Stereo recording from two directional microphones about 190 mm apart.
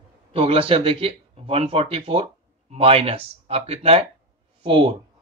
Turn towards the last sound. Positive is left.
turn(degrees=-30)  # may be behind; listen again after turning